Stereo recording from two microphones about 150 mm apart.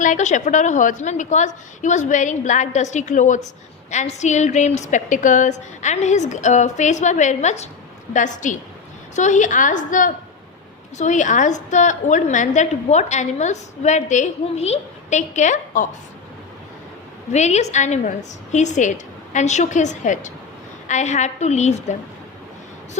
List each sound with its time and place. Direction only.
0.0 s a woman's voice: 55° left (ahead or behind)
17.3 s a woman's voice: 50° left (ahead or behind)